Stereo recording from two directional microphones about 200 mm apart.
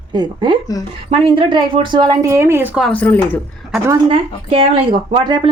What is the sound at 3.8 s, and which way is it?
Speech, 20° right (ahead or behind).